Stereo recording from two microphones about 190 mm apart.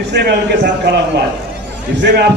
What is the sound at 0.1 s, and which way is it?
A man's voice, 60° right (ahead or behind).